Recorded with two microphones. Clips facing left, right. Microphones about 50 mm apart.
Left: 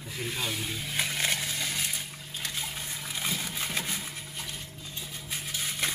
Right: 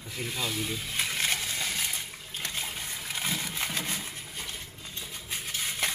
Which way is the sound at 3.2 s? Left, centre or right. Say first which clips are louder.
Right 1 dB; centre.